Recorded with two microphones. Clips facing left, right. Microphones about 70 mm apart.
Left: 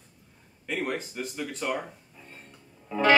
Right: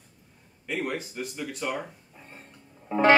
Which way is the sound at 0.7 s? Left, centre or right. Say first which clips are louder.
Even; centre.